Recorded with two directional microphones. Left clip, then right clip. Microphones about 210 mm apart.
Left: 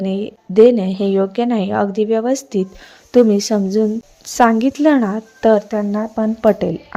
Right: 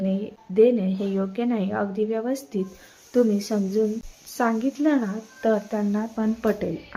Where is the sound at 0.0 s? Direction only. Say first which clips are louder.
Left 6 dB; 35° left (ahead or behind).